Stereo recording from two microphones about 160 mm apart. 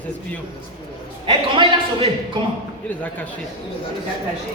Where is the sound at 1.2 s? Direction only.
35° right (ahead or behind).